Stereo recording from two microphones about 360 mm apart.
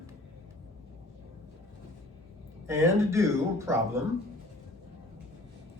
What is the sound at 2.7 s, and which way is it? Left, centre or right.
Speech, centre.